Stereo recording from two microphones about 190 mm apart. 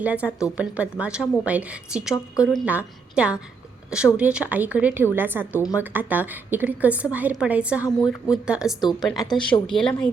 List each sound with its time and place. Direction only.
0.0 s a woman's voice: 5° right (ahead or behind)